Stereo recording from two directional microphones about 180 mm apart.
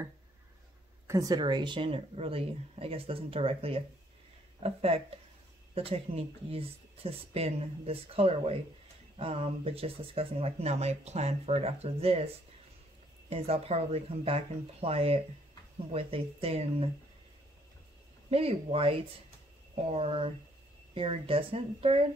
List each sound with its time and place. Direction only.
1.0 s speech: 20° right (ahead or behind)
13.3 s speech: 35° right (ahead or behind)
18.3 s speech: 35° right (ahead or behind)